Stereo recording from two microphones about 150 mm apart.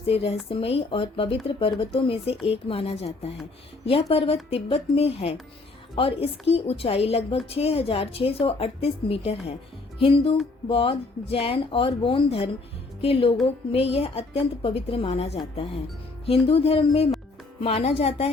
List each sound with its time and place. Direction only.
0.1 s a woman's voice: 40° left (ahead or behind)
10.7 s a woman's voice: 40° left (ahead or behind)